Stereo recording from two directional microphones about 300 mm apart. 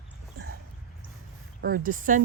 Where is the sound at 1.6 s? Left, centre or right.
Right.